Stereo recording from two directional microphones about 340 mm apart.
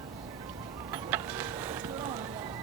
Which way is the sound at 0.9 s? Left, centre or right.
Centre.